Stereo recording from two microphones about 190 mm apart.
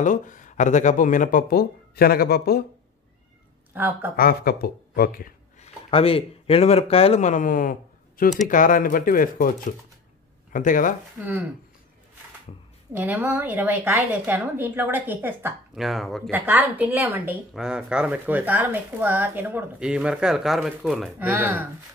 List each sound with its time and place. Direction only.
0.0 s speech: 40° left (ahead or behind)
3.7 s a woman's voice: 10° right (ahead or behind)
4.2 s speech: 50° left (ahead or behind)
5.9 s speech: 30° left (ahead or behind)
11.2 s a woman's voice: 10° right (ahead or behind)
12.9 s a woman's voice: 10° right (ahead or behind)
21.3 s a woman's voice: 10° right (ahead or behind)